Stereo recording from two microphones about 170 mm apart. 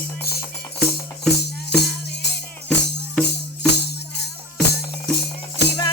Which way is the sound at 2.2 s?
85° left.